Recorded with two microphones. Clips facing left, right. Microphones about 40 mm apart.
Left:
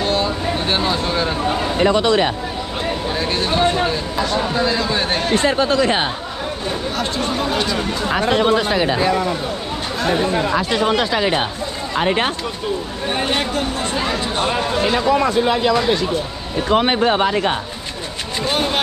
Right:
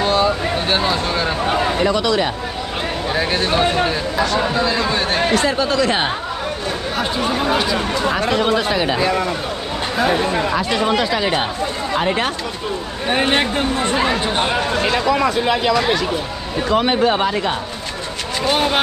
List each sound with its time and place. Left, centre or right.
0.0 s a sound: centre
0.7 s speech: centre
1.5 s a man's voice: right
1.8 s speech: left
3.1 s speech: centre
5.3 s speech: left
6.9 s speech: centre
8.1 s speech: left
12.0 s speech: left
13.1 s speech: right
16.8 s speech: left
17.2 s speech: left
18.4 s speech: centre